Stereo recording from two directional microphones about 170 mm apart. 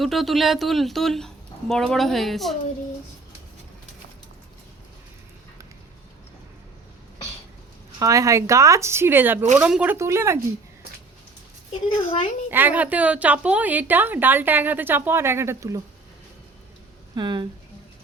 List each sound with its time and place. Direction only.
0.0 s speech: centre (ahead or behind)
7.9 s a woman's voice: 20° right (ahead or behind)
11.7 s speech: 35° left (ahead or behind)
12.5 s a woman's voice: 10° right (ahead or behind)
17.2 s speech: 25° right (ahead or behind)